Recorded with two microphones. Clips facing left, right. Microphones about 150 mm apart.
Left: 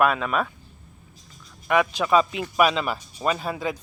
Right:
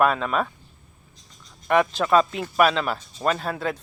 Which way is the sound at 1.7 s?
5° left (ahead or behind).